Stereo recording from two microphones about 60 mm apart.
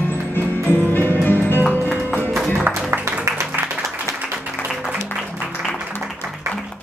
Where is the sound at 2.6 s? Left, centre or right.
Right.